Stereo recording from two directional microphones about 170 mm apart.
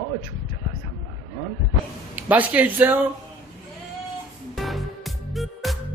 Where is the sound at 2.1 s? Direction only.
10° right (ahead or behind).